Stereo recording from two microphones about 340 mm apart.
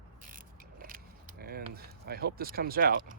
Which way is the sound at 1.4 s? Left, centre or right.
Right.